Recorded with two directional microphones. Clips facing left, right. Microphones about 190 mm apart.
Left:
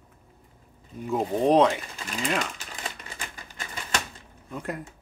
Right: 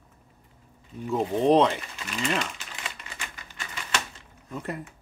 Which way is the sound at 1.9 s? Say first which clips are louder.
Even; 40° left (ahead or behind).